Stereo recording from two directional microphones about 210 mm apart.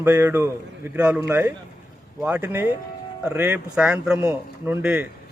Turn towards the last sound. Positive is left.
turn(degrees=-10)  # may be behind; listen again after turning